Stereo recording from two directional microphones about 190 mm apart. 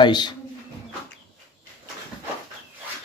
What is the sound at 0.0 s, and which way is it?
Music, 20° left (ahead or behind).